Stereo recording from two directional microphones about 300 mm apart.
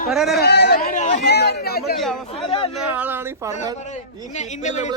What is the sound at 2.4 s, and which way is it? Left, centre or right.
Speech, centre.